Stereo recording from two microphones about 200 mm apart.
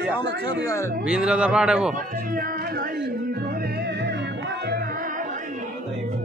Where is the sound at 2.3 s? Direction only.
45° right (ahead or behind).